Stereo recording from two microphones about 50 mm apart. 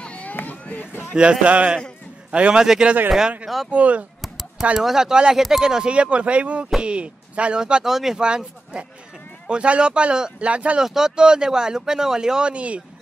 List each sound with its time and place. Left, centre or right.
0.0 s a sound: left
1.4 s speech: right
2.6 s speech: centre
3.7 s speech: right
4.2 s a sound: centre
4.7 s speech: centre
8.2 s speech: centre
10.8 s speech: centre